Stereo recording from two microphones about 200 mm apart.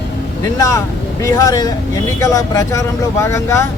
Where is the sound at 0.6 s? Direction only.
15° left (ahead or behind).